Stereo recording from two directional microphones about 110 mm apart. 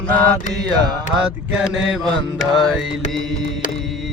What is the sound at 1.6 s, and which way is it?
Music, centre (ahead or behind).